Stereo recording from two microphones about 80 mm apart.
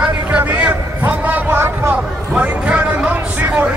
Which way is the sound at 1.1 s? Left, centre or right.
Right.